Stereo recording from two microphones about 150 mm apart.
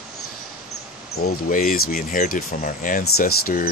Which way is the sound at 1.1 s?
85° left.